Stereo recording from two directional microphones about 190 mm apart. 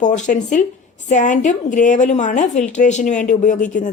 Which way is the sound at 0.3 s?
40° left (ahead or behind).